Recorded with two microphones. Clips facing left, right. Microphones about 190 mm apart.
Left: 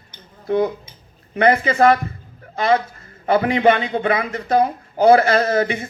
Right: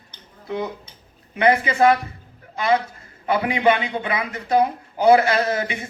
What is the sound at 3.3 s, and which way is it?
A man's voice, 45° left (ahead or behind).